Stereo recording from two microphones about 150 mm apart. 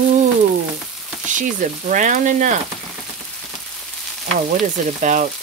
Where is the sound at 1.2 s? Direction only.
60° right (ahead or behind).